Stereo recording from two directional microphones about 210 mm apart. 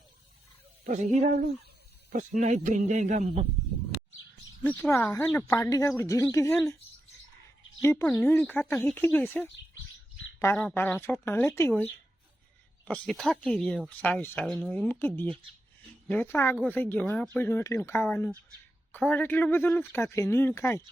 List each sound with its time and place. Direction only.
0.9 s a man's voice: 35° right (ahead or behind)
4.6 s speech: 10° left (ahead or behind)
7.8 s speech: 10° left (ahead or behind)
10.6 s speech: 5° left (ahead or behind)